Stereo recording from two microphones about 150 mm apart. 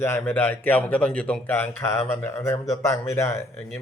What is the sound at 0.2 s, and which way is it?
Speech, 10° left (ahead or behind).